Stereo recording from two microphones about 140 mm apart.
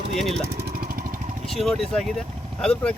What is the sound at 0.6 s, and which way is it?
Lawn mower, 90° right.